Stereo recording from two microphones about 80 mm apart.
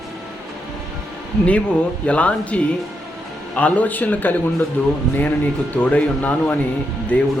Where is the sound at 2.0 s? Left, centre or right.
Centre.